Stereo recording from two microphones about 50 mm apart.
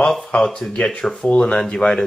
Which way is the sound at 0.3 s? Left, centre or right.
Centre.